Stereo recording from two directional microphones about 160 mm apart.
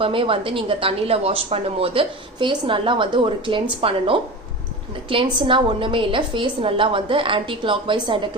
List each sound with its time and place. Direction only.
0.0 s speech: 35° right (ahead or behind)